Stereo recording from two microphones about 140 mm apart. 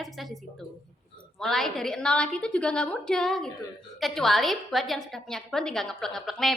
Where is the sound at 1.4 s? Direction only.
Centre (ahead or behind).